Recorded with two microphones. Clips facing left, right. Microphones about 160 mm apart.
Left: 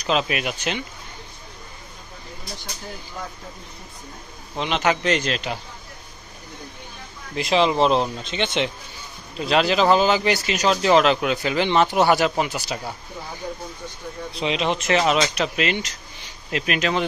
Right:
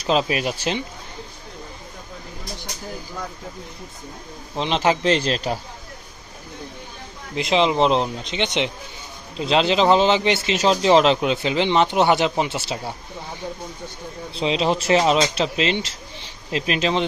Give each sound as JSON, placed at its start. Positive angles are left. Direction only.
{"t": 0.0, "sound": "a man's voice", "side_deg": -30}
{"t": 4.6, "sound": "a man's voice", "side_deg": -30}
{"t": 7.3, "sound": "speech", "side_deg": -20}
{"t": 14.3, "sound": "speech", "side_deg": -30}